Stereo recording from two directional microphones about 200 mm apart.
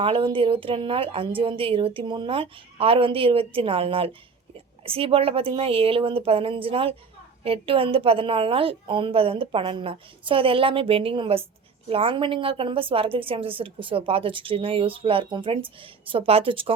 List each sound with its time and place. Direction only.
0.0 s a woman's voice: 25° right (ahead or behind)